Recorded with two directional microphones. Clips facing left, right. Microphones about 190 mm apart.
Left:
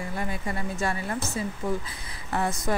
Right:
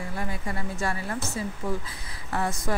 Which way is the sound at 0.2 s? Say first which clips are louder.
Left 1 dB; 20° left (ahead or behind).